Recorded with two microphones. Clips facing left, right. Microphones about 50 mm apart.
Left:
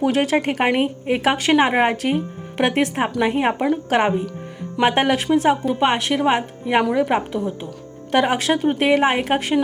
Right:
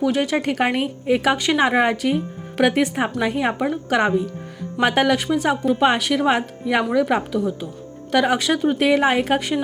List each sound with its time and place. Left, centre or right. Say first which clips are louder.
0.0 s a woman's voice: left 2 dB; left
4.8 s a woman's voice: even; left
8.9 s speech: left 1 dB; centre